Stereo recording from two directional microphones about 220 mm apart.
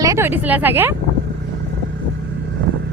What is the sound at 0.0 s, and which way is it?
Speech, 10° right (ahead or behind).